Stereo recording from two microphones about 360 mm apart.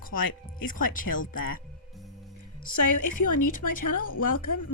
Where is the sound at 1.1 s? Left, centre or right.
Left.